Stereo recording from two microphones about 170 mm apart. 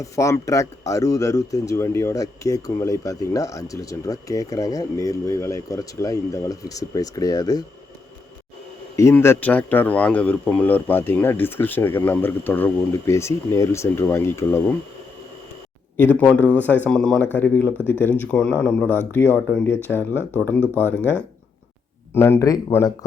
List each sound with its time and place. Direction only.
0.0 s speech: 20° left (ahead or behind)
9.0 s speech: 15° left (ahead or behind)
16.0 s speech: 10° left (ahead or behind)